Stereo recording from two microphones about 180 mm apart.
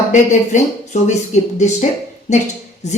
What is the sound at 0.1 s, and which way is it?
Speech, 40° left (ahead or behind).